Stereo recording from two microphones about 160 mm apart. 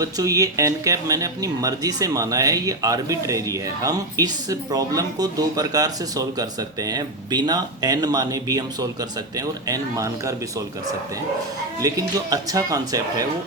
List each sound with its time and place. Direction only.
0.0 s speech: 20° right (ahead or behind)
11.8 s speech: 20° right (ahead or behind)